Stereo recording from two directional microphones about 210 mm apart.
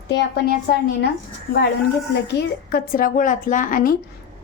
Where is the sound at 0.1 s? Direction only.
50° left (ahead or behind).